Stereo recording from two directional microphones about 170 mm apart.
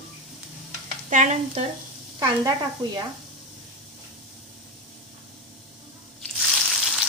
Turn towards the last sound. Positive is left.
turn(degrees=0)  # may be behind; listen again after turning